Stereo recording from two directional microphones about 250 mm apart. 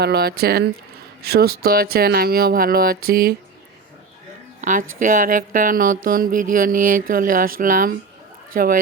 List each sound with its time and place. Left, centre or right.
0.0 s speech: right
4.6 s speech: right